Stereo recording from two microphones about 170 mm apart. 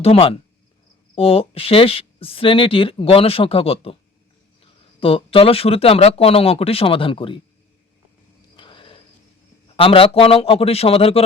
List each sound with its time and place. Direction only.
0.0 s speech: 35° left (ahead or behind)
4.9 s speech: 35° left (ahead or behind)
8.5 s a sound: 30° left (ahead or behind)
9.7 s speech: 35° left (ahead or behind)